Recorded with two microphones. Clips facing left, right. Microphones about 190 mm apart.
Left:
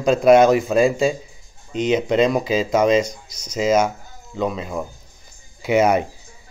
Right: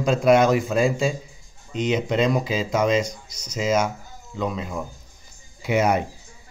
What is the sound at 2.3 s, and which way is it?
Speech, 10° left (ahead or behind).